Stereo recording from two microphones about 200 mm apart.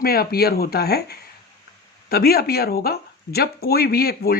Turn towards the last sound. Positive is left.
turn(degrees=50)  # may be behind; listen again after turning